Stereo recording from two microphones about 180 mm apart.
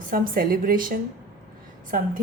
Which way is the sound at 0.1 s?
55° right (ahead or behind).